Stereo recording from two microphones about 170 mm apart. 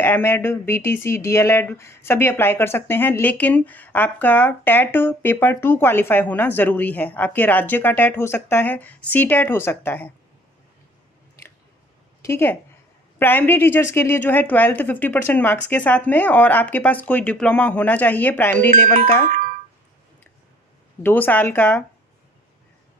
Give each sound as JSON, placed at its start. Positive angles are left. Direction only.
{"t": 0.0, "sound": "speech", "side_deg": 10}
{"t": 12.2, "sound": "speech", "side_deg": 15}
{"t": 19.2, "sound": "music", "side_deg": -55}
{"t": 21.0, "sound": "speech", "side_deg": 10}